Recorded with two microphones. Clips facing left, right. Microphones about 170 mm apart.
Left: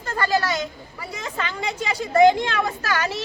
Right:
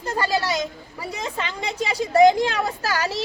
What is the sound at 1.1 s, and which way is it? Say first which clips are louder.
Speech: even; 35° right (ahead or behind).